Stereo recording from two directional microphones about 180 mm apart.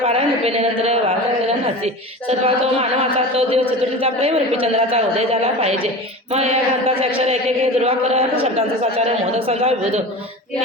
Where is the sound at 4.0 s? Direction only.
30° right (ahead or behind).